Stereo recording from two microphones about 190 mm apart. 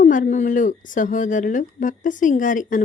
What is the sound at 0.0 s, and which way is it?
Speech, 40° left (ahead or behind).